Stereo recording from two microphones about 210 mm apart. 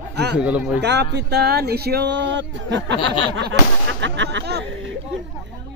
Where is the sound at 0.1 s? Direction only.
55° right (ahead or behind).